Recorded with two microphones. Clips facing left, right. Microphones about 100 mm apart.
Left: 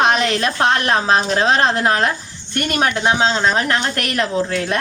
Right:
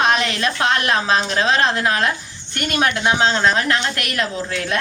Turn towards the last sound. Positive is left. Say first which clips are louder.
# left 4 dB
turn(degrees=35)  # may be behind; listen again after turning